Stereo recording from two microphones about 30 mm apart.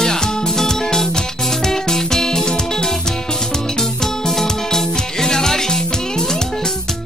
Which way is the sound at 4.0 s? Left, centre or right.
Centre.